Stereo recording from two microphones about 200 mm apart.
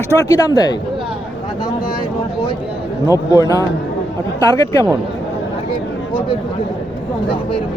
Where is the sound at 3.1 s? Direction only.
15° left (ahead or behind).